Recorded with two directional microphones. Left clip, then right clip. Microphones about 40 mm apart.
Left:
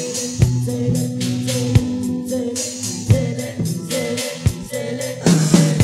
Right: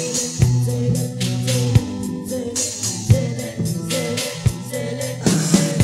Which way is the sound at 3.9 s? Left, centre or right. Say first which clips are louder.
Left 1 dB; right.